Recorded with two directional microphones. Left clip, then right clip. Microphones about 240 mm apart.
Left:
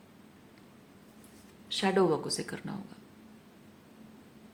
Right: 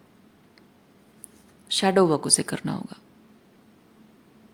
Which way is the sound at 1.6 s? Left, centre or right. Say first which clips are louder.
Right 7 dB; right.